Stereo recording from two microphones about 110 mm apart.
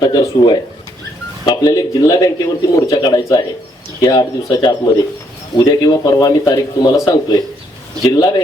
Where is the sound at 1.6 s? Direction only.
35° left (ahead or behind).